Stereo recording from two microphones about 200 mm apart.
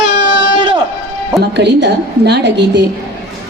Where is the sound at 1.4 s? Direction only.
55° right (ahead or behind).